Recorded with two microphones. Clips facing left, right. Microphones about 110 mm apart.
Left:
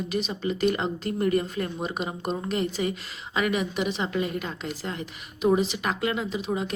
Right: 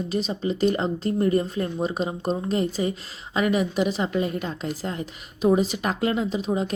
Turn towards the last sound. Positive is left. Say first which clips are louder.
# right 4 dB
turn(degrees=-40)  # may be behind; listen again after turning